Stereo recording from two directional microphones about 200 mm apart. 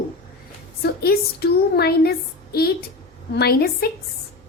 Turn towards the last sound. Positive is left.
turn(degrees=50)  # may be behind; listen again after turning